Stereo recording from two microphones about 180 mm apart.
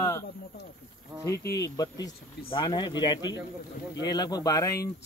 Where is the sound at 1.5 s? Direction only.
20° left (ahead or behind).